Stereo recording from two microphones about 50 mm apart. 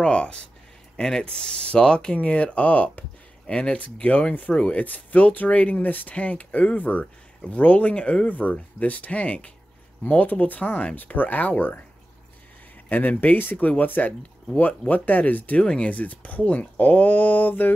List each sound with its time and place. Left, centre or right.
0.0 s speech: centre
3.8 s speech: left
6.1 s speech: left
12.9 s speech: left
15.6 s speech: centre
15.9 s speech: left